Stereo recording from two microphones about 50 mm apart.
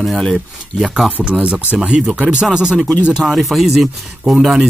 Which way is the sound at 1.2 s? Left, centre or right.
Right.